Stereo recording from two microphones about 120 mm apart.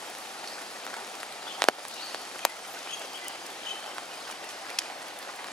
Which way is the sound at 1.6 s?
5° left (ahead or behind).